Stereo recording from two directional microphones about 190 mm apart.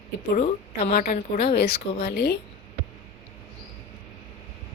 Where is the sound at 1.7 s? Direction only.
60° left (ahead or behind).